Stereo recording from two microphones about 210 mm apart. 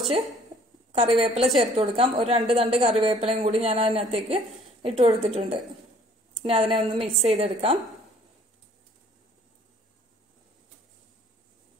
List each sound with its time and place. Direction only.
0.9 s speech: 25° right (ahead or behind)